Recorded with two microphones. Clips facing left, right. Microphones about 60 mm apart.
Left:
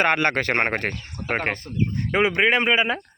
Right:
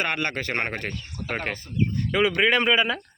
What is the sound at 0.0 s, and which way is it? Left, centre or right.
Speech, left.